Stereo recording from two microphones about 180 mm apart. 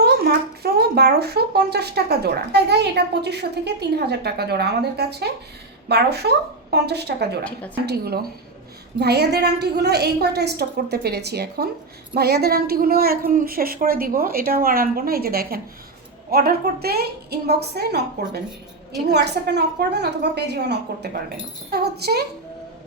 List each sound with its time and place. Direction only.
0.0 s speech: 60° right (ahead or behind)
19.0 s a woman's voice: 70° right (ahead or behind)